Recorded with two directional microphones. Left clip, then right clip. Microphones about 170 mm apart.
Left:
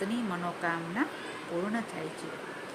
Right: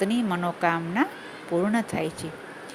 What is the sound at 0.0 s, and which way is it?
Speech, 45° right (ahead or behind).